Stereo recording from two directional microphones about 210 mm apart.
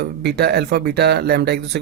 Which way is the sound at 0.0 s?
50° right (ahead or behind).